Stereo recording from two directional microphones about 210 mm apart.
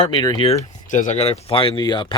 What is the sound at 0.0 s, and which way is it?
Speech, 20° left (ahead or behind).